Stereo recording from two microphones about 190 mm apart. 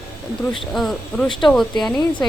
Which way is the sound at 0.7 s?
Centre (ahead or behind).